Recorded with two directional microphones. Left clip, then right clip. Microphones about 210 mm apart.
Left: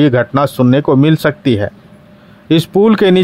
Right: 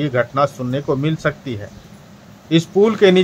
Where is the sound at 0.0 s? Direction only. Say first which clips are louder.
Left 6 dB; 50° left (ahead or behind).